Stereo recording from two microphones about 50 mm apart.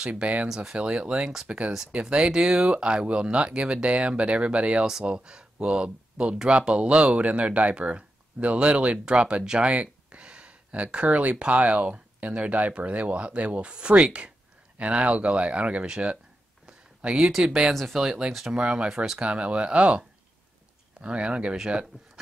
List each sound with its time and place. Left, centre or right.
0.0 s speech: right
16.6 s a sound: centre
17.3 s speech: centre
18.0 s speech: centre
18.5 s speech: centre